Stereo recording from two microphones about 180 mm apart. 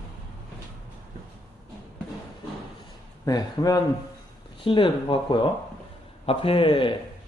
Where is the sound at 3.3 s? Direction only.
20° left (ahead or behind).